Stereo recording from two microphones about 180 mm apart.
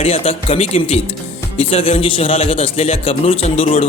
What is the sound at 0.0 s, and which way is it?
Speech, 35° left (ahead or behind).